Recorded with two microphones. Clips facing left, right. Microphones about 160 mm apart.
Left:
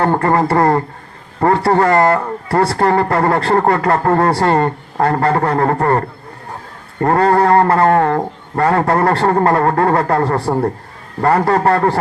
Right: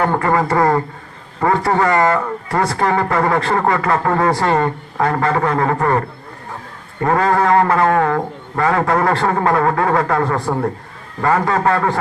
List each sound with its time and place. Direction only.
0.1 s a man's voice: 40° left (ahead or behind)
7.0 s speech: 45° left (ahead or behind)